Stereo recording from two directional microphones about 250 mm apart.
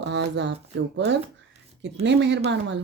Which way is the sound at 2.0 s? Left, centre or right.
Right.